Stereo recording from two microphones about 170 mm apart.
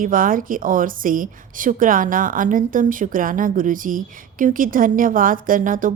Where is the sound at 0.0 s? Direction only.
55° right (ahead or behind).